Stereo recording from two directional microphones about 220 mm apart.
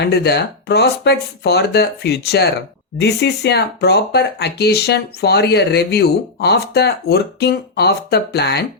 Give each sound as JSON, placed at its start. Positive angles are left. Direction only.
{"t": 0.0, "sound": "speech", "side_deg": 50}